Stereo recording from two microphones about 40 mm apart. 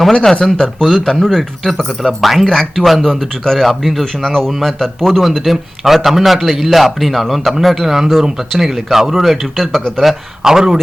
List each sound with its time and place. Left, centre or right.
0.1 s speech: centre
0.9 s a man's voice: centre
4.0 s speech: centre
4.6 s a man's voice: centre
10.4 s speech: centre